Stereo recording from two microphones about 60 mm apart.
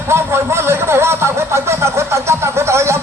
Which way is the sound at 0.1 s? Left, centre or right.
Right.